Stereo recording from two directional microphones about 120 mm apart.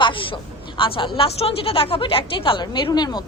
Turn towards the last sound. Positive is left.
turn(degrees=35)  # may be behind; listen again after turning